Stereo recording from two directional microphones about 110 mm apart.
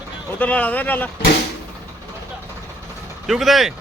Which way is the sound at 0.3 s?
15° left (ahead or behind).